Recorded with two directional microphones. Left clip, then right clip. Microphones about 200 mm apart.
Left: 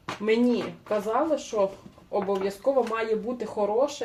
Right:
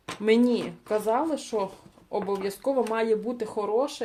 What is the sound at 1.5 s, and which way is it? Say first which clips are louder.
Speech: left 4 dB; 45° right (ahead or behind).